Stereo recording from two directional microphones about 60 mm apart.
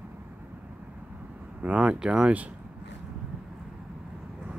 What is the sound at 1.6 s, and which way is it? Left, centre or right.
Speech, right.